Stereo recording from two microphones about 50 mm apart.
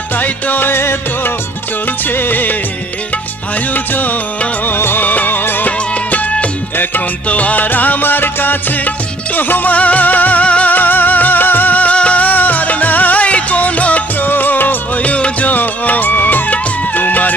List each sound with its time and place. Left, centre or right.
0.2 s music: left
3.9 s music: left
4.6 s music: left
5.9 s music: left